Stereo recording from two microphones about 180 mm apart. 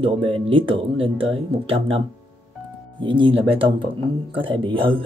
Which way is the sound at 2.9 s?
25° right (ahead or behind).